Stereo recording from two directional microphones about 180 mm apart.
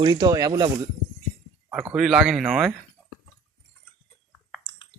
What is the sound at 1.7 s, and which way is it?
Speech, 5° right (ahead or behind).